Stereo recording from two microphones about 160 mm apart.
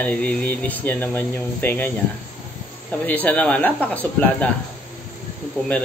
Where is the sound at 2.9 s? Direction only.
10° left (ahead or behind).